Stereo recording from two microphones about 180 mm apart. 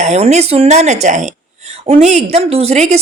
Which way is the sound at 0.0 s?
40° right (ahead or behind).